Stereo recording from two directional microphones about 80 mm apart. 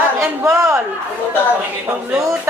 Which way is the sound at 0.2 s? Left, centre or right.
Right.